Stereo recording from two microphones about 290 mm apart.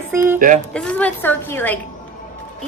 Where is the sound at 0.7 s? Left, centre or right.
Centre.